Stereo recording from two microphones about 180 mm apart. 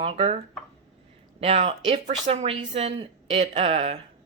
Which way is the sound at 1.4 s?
35° right (ahead or behind).